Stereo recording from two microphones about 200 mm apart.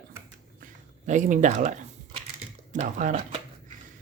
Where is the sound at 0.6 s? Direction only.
40° right (ahead or behind).